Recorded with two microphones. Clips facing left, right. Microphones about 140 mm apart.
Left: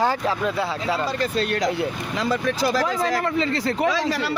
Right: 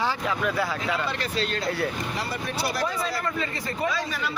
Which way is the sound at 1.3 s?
50° left (ahead or behind).